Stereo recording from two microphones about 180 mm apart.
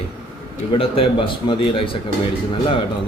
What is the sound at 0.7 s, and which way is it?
A man's voice, 30° left (ahead or behind).